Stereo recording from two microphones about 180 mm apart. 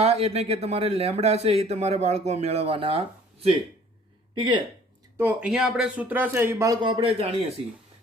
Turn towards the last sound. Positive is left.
turn(degrees=-35)  # may be behind; listen again after turning